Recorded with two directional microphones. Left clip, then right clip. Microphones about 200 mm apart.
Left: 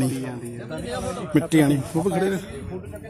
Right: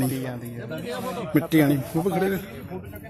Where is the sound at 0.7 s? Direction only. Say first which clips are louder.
Even; 10° right (ahead or behind).